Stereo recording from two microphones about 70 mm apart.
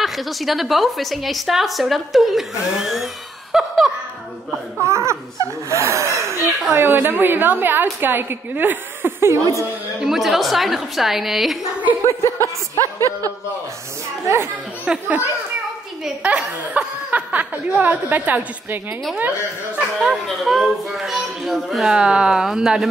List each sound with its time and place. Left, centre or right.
0.0 s a woman's voice: centre
3.5 s laughter: centre
4.8 s laughter: right
6.7 s a woman's voice: right
9.9 s a woman's voice: centre
12.1 s a woman's voice: left
14.2 s laughter: right
14.9 s a woman's voice: right
20.2 s a woman's voice: centre